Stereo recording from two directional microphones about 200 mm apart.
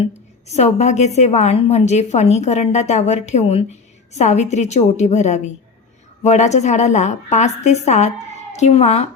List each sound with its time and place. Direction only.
0.0 s a woman's voice: 35° left (ahead or behind)